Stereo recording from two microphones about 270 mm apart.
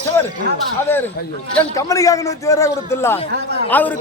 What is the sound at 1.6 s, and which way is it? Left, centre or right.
Speech, centre.